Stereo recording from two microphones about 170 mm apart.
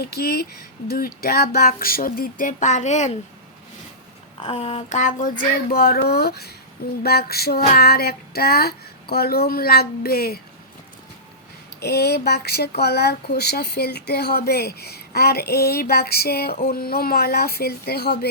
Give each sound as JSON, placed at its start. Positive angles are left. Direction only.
{"t": 0.0, "sound": "child singing", "side_deg": 65}
{"t": 4.4, "sound": "child singing", "side_deg": 35}
{"t": 11.8, "sound": "speech", "side_deg": 70}